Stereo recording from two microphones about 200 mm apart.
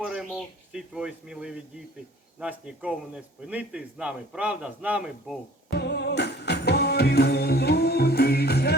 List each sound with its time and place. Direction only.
0.0 s a man's voice: 5° right (ahead or behind)
5.7 s music: 55° left (ahead or behind)